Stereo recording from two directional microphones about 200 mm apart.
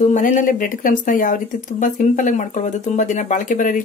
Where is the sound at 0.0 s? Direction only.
40° left (ahead or behind).